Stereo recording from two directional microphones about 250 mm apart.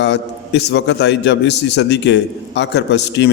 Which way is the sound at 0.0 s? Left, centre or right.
Left.